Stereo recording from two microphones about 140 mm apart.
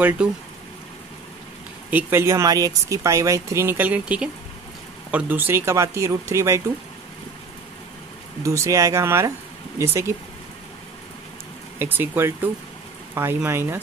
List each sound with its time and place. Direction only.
0.2 s speech: 5° right (ahead or behind)
1.9 s speech: 15° right (ahead or behind)
8.4 s speech: 20° right (ahead or behind)
11.8 s speech: 15° right (ahead or behind)